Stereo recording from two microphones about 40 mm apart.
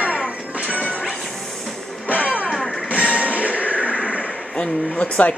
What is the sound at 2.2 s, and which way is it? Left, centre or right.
Music, right.